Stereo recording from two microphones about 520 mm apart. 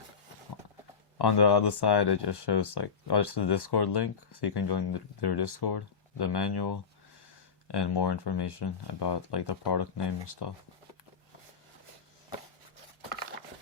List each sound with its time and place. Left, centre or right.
1.2 s speech: left